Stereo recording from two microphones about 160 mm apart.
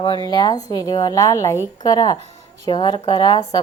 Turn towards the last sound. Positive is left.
turn(degrees=25)  # may be behind; listen again after turning